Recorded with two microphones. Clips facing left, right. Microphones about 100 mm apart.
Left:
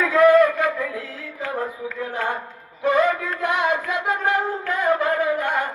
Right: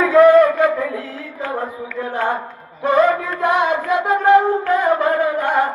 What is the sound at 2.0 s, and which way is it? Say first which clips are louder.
Mantra: right 6 dB; 30° right (ahead or behind).